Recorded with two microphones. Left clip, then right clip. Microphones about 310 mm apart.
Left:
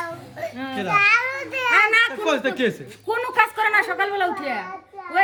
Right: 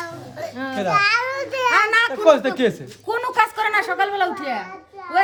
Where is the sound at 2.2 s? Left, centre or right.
Right.